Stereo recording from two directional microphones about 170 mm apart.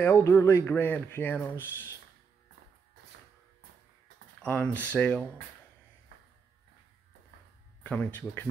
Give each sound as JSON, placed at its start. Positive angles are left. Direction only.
{"t": 0.0, "sound": "speech", "side_deg": 15}
{"t": 4.4, "sound": "speech", "side_deg": 5}
{"t": 7.8, "sound": "speech", "side_deg": 10}